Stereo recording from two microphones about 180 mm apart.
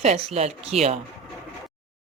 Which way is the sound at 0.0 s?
35° right (ahead or behind).